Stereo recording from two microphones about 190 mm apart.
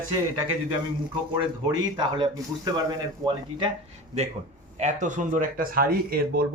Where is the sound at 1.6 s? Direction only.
20° right (ahead or behind).